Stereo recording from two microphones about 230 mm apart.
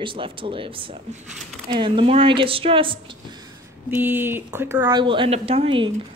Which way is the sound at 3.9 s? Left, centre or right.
Centre.